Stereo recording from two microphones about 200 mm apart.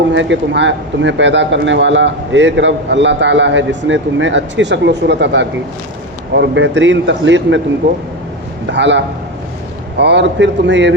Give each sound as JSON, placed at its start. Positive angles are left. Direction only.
{"t": 0.1, "sound": "a man's voice", "side_deg": -65}
{"t": 8.7, "sound": "a man's voice", "side_deg": -60}